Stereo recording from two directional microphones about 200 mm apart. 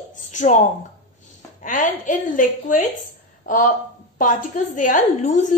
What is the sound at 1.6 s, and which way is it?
A woman's voice, 40° left (ahead or behind).